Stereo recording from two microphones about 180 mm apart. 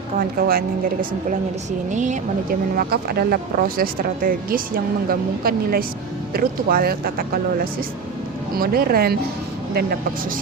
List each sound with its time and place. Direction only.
0.2 s speech: 55° right (ahead or behind)
1.9 s speech: 40° right (ahead or behind)